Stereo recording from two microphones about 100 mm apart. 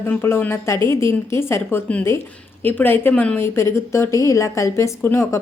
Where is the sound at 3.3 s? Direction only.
25° left (ahead or behind).